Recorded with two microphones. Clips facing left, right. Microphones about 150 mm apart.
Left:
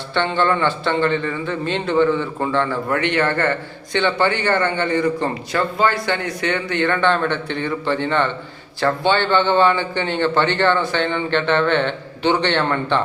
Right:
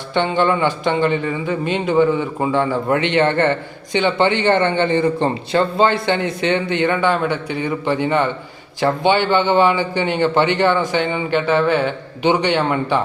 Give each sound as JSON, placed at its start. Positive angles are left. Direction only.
{"t": 0.1, "sound": "a man's voice", "side_deg": -15}